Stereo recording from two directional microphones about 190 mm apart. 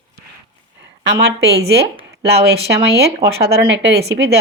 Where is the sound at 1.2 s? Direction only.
60° right (ahead or behind).